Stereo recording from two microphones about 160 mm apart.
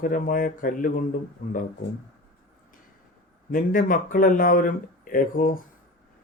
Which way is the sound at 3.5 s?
60° left (ahead or behind).